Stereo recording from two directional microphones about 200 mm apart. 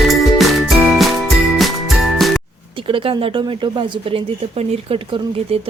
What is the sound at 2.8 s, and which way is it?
A woman's voice, 25° right (ahead or behind).